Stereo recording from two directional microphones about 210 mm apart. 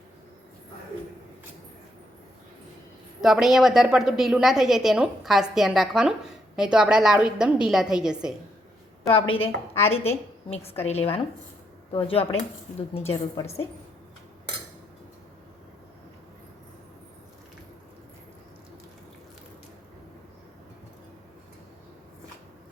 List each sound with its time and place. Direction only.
3.2 s a woman's voice: centre (ahead or behind)
9.1 s a woman's voice: 25° left (ahead or behind)